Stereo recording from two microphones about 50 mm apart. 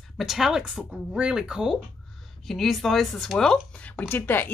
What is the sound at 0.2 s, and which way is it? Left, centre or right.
Speech, centre.